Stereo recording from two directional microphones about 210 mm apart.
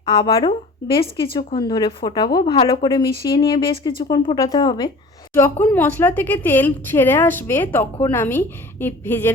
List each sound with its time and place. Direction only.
0.0 s a woman's voice: 25° left (ahead or behind)